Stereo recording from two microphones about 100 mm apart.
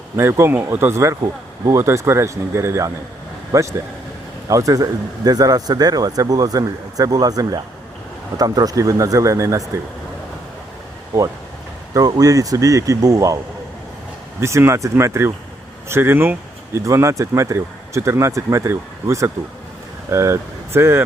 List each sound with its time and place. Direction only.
0.2 s speech: 25° right (ahead or behind)
11.9 s speech: 40° right (ahead or behind)
14.4 s speech: 30° right (ahead or behind)